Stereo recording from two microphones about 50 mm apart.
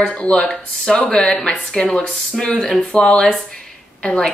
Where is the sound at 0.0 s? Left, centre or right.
Left.